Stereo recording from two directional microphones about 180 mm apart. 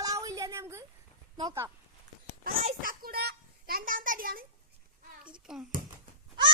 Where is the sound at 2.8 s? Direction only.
55° right (ahead or behind).